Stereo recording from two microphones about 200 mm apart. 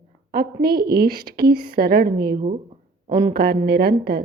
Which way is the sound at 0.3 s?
50° right (ahead or behind).